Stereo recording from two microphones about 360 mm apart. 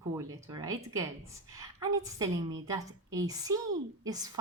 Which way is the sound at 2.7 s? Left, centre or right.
Centre.